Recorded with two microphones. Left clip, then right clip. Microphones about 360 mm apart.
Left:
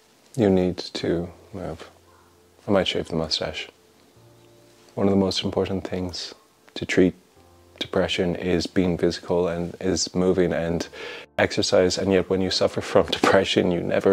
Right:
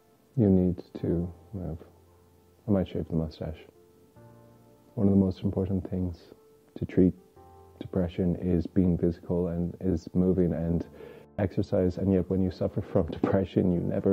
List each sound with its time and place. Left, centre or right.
0.4 s speech: centre
4.9 s speech: centre